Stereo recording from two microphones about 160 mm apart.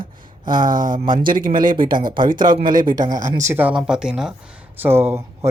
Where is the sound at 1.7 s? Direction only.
30° right (ahead or behind).